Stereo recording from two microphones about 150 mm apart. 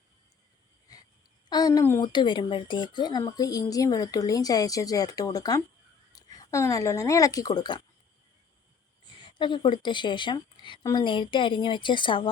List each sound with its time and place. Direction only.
0.9 s wheeze: 25° left (ahead or behind)
1.5 s a sound: 25° left (ahead or behind)
2.0 s speech: 30° left (ahead or behind)
9.4 s speech: 30° left (ahead or behind)